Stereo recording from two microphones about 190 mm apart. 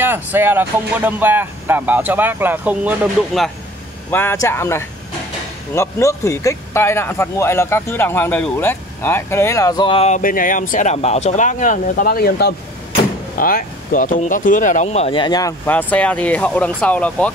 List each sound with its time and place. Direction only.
0.0 s speech: 10° right (ahead or behind)
4.1 s speech: 10° left (ahead or behind)